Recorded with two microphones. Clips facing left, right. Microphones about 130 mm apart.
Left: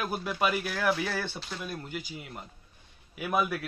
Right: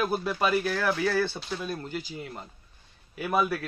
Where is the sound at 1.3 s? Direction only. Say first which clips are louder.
Right 5 dB; 5° right (ahead or behind).